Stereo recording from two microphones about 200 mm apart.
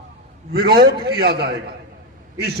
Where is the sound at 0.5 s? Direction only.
50° right (ahead or behind).